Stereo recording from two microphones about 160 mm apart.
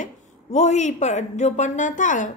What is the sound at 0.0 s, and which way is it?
A woman's voice, 45° left (ahead or behind).